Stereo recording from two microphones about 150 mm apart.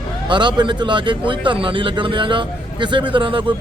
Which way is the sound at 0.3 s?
30° right (ahead or behind).